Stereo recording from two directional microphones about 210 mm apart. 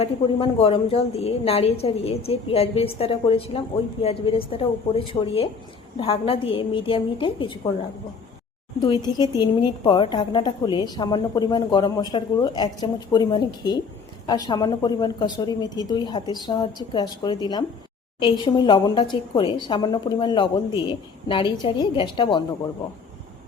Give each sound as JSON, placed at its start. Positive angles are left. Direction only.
{"t": 0.0, "sound": "a woman's voice", "side_deg": 25}
{"t": 8.8, "sound": "a woman's voice", "side_deg": 20}